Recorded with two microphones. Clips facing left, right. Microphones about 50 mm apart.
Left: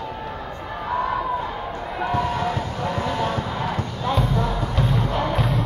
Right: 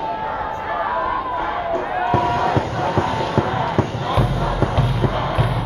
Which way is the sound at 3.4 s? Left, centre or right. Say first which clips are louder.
Right 7 dB; right.